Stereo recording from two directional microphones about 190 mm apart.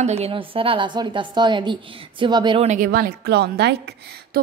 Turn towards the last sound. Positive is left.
turn(degrees=-60)  # may be behind; listen again after turning